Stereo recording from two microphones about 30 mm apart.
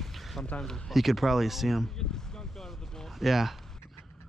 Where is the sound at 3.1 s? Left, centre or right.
Centre.